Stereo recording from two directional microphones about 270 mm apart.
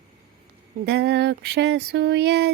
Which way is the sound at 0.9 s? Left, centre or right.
Right.